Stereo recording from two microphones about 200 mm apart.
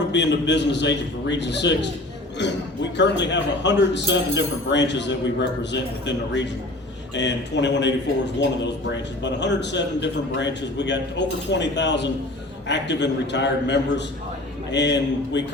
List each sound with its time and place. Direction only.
0.1 s a man's voice: 60° left (ahead or behind)